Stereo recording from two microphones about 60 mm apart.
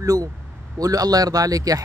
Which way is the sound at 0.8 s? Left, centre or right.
Right.